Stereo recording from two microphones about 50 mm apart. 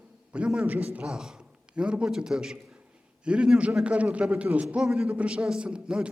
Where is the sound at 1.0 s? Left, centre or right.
Centre; by 4.6 s right.